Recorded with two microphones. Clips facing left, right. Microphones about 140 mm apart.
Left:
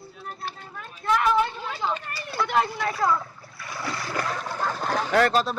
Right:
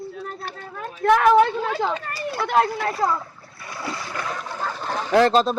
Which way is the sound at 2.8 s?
40° right (ahead or behind).